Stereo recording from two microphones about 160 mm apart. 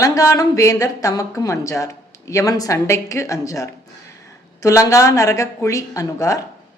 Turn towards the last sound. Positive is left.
turn(degrees=20)  # may be behind; listen again after turning